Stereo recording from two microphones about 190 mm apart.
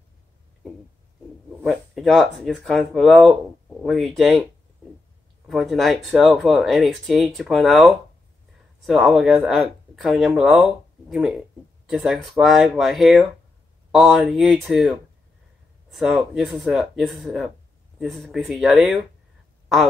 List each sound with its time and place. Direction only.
1.6 s speech: centre (ahead or behind)
5.5 s speech: centre (ahead or behind)